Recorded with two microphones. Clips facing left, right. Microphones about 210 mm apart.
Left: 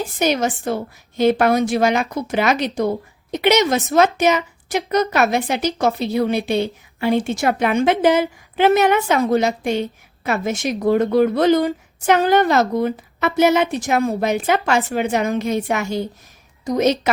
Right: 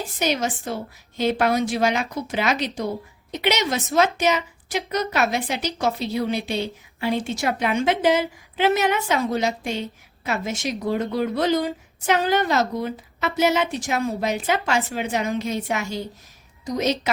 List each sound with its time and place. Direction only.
0.2 s a woman's voice: 50° left (ahead or behind)